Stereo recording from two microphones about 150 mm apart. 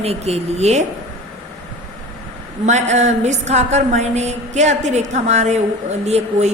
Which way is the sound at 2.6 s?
50° right (ahead or behind).